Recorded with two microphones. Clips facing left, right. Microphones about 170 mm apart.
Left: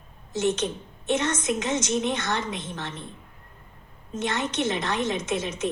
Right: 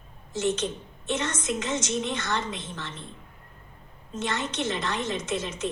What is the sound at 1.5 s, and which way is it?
A woman's voice, 60° left (ahead or behind).